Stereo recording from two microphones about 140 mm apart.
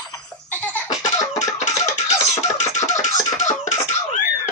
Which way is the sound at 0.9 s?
60° left (ahead or behind).